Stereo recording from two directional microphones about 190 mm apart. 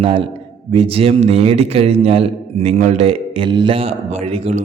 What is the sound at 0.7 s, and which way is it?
A man's voice, 30° right (ahead or behind).